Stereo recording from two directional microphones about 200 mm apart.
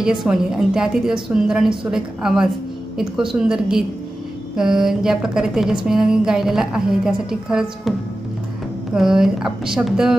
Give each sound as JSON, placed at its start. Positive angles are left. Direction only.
{"t": 0.0, "sound": "a woman's voice", "side_deg": -5}
{"t": 8.9, "sound": "a woman's voice", "side_deg": 0}